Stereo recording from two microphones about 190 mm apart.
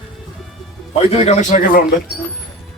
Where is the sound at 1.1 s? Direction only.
35° left (ahead or behind).